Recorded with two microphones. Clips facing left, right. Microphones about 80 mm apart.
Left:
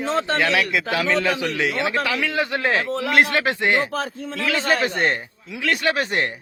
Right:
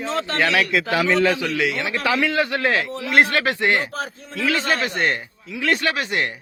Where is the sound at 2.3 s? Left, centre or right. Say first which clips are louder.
Right 1 dB; centre.